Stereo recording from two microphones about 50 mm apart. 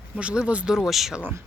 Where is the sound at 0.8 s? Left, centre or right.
Centre.